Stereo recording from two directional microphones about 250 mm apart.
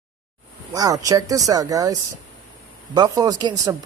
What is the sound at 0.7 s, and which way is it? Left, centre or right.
Speech, centre.